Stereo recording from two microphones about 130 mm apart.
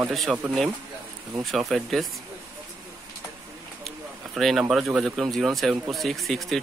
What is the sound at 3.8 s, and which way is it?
Speech, centre (ahead or behind).